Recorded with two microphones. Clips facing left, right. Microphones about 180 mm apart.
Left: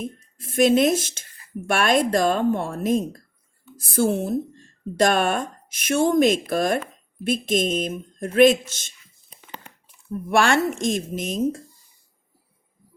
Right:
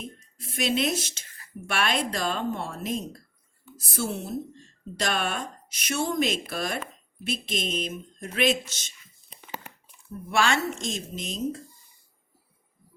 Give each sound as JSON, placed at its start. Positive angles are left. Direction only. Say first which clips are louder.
{"t": 0.3, "sound": "speech", "louder": "left 10 dB", "side_deg": 50}
{"t": 10.2, "sound": "speech", "louder": "left 6 dB", "side_deg": 55}